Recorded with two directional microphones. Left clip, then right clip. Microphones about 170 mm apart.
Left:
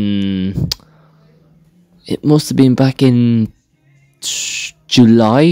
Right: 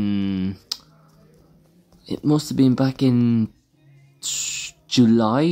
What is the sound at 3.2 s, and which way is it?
Speech, 25° left (ahead or behind).